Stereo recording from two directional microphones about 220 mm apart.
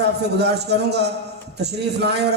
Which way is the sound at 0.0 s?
50° right (ahead or behind).